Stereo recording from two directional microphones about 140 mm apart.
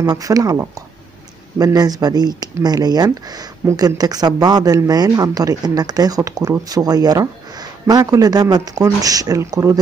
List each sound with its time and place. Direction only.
0.0 s speech: 25° right (ahead or behind)